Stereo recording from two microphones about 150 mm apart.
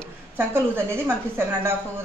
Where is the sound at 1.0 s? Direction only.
15° right (ahead or behind).